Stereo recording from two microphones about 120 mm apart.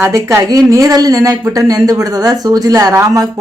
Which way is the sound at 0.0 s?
25° right (ahead or behind).